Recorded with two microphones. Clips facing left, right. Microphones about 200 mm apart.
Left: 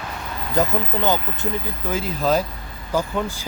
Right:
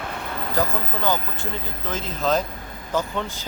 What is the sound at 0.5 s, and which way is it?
Speech, 20° left (ahead or behind).